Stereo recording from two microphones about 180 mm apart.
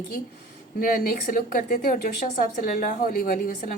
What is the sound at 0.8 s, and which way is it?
A woman's voice, 50° left (ahead or behind).